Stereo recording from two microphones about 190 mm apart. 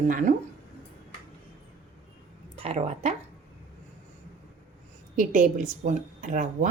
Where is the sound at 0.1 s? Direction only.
45° right (ahead or behind).